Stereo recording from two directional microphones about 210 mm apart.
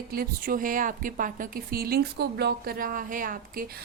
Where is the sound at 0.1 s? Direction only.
45° right (ahead or behind).